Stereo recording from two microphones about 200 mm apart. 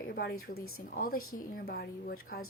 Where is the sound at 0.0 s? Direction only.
50° left (ahead or behind).